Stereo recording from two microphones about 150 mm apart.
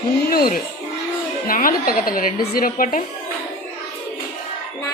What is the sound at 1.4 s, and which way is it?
A woman's voice, 70° left (ahead or behind).